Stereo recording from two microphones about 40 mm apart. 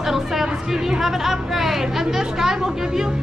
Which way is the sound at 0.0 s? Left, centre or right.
Centre.